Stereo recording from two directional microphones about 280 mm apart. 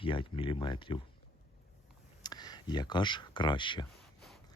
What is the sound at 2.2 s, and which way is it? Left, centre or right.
Speech, centre.